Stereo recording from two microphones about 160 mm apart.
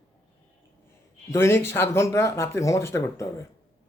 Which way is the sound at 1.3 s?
15° left (ahead or behind).